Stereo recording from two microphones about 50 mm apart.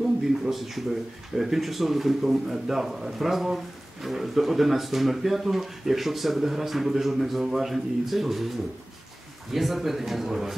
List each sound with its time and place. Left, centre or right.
0.2 s a man's voice: centre
9.5 s a man's voice: centre